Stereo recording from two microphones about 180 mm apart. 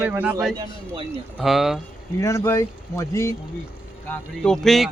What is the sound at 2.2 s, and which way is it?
Speech, 15° left (ahead or behind).